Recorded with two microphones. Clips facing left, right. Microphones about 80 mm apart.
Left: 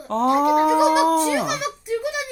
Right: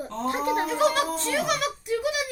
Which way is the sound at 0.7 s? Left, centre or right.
Centre.